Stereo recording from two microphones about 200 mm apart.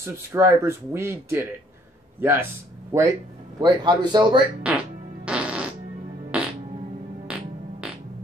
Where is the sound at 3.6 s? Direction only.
20° right (ahead or behind).